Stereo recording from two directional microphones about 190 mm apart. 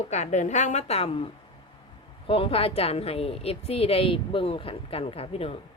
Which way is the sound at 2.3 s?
30° left (ahead or behind).